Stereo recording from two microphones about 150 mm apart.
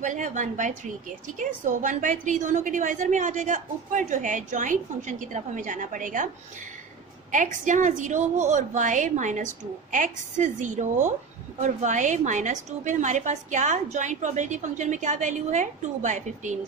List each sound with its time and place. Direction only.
0.0 s a woman's voice: 55° right (ahead or behind)